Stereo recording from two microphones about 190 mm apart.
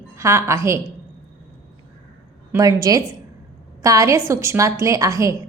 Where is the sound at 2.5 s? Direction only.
20° right (ahead or behind).